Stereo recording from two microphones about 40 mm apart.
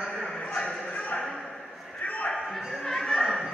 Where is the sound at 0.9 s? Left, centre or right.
Left.